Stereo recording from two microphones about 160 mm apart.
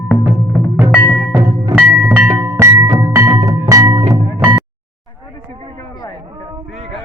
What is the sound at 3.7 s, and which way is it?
Music, 20° right (ahead or behind).